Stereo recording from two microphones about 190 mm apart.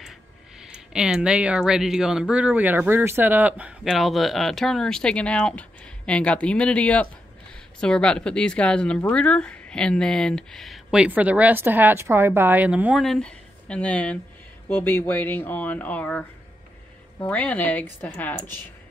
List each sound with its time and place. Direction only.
0.7 s speech: 5° right (ahead or behind); by 18.7 s 10° left (ahead or behind)